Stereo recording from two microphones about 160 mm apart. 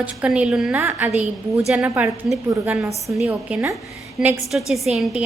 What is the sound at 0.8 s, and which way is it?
Speech, 15° right (ahead or behind).